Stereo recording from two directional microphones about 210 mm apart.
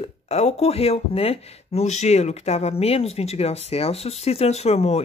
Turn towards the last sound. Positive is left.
turn(degrees=30)  # may be behind; listen again after turning